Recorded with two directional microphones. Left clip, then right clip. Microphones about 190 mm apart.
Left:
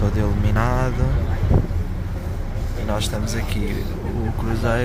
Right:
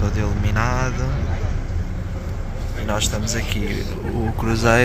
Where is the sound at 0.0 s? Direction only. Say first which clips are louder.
Left 1 dB; 25° left (ahead or behind).